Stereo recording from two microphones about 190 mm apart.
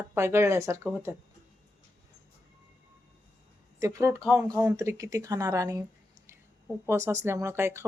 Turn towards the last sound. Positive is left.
turn(degrees=-15)  # may be behind; listen again after turning